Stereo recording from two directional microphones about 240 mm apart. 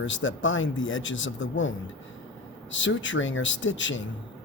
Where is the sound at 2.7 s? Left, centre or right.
Left.